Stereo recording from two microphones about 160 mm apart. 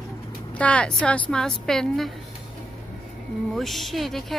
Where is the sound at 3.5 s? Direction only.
Centre (ahead or behind).